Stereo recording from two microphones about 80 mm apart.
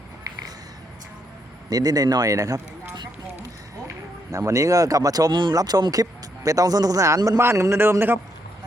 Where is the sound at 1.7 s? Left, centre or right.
Right.